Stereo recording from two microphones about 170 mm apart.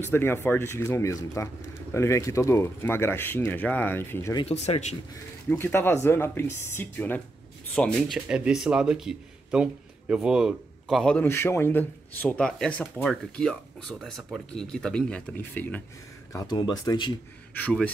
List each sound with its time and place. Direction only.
0.0 s speech: 15° left (ahead or behind)
4.4 s speech: 35° left (ahead or behind)
5.5 s speech: 15° left (ahead or behind)
8.3 s a man's voice: 5° right (ahead or behind); by 15.8 s 10° left (ahead or behind)
16.3 s speech: 25° left (ahead or behind)
17.6 s speech: 10° left (ahead or behind)